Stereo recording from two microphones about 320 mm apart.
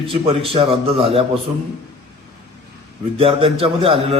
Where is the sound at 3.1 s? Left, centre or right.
Centre.